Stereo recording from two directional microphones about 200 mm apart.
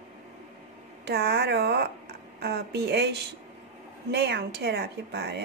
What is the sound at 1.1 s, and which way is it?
A woman's voice, 55° right (ahead or behind).